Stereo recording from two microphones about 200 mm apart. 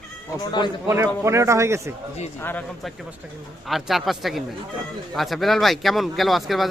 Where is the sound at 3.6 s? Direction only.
Centre (ahead or behind).